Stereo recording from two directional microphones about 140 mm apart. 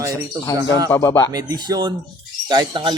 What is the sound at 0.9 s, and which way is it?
Speech, 20° left (ahead or behind).